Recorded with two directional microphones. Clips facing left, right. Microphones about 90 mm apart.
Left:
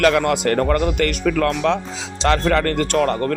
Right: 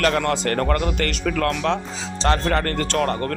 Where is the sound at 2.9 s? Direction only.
40° left (ahead or behind).